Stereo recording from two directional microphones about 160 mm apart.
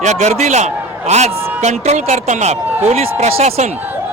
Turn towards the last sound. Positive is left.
turn(degrees=-40)  # may be behind; listen again after turning